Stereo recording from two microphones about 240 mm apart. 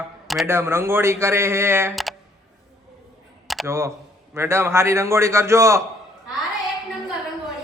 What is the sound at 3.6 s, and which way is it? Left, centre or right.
Speech, centre.